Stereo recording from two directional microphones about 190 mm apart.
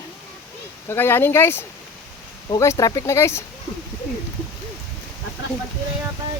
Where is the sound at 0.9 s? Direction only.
10° left (ahead or behind).